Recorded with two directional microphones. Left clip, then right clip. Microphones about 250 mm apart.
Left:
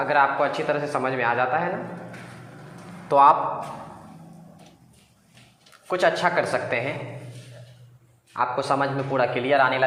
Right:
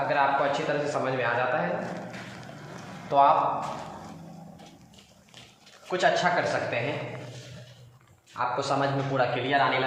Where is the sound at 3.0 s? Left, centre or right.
Left.